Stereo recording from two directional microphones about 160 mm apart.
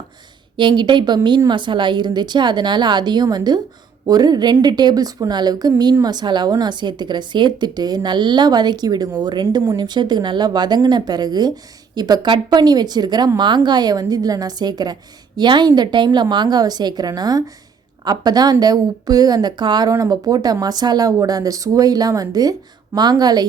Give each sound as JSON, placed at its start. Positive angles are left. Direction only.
{"t": 0.5, "sound": "speech", "side_deg": -30}